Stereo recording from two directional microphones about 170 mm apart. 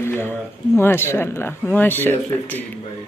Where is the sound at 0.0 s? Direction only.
15° left (ahead or behind).